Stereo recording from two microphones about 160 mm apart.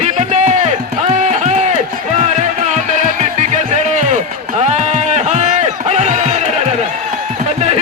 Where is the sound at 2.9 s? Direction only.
45° right (ahead or behind).